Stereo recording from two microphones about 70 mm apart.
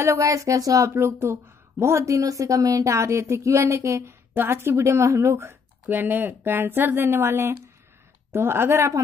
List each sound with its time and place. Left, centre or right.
0.0 s speech: right
0.9 s a woman's voice: right